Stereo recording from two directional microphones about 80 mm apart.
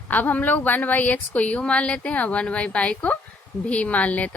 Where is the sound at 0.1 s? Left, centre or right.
Left.